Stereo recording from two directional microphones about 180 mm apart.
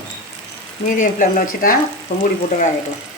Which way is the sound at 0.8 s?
45° left (ahead or behind).